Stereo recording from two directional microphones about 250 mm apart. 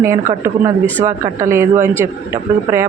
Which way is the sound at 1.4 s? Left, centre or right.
Centre.